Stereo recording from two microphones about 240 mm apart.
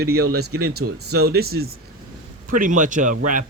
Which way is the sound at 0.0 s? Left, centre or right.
Right.